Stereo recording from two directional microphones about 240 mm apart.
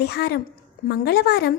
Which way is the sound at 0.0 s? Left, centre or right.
Left.